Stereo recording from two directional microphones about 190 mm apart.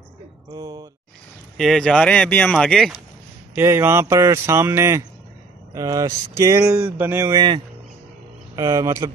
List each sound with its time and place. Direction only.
0.5 s speech: 20° right (ahead or behind)
1.6 s speech: centre (ahead or behind)
3.5 s speech: 10° right (ahead or behind)